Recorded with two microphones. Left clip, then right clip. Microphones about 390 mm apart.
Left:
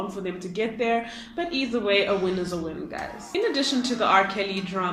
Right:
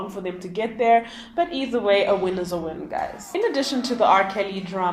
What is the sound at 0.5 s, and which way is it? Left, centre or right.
A woman's voice, centre.